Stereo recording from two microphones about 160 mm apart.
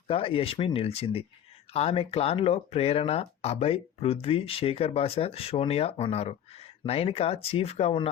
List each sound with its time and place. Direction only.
0.1 s speech: 35° left (ahead or behind)